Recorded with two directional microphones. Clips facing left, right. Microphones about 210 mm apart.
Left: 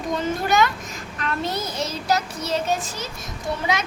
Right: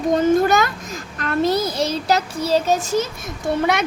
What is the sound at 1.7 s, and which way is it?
A child's voice, 35° right (ahead or behind).